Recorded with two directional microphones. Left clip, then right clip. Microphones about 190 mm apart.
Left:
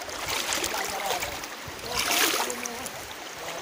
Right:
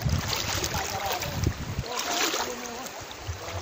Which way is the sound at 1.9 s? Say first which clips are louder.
Left 3 dB; 10° left (ahead or behind).